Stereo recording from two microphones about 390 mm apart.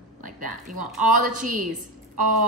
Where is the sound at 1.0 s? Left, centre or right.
Centre.